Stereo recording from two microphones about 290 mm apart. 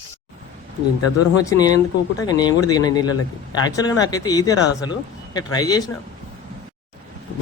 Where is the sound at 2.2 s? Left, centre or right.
Centre.